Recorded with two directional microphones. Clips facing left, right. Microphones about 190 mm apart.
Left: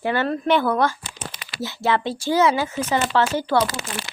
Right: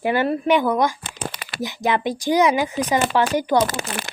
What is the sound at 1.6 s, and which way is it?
Speech, 15° right (ahead or behind).